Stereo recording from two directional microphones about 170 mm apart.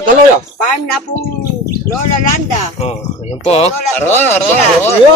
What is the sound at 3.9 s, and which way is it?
Speech, 10° left (ahead or behind).